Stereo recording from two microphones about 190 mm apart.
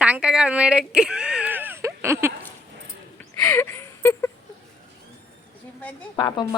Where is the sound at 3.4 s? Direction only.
10° left (ahead or behind).